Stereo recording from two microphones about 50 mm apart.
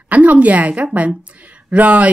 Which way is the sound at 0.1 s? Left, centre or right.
Right.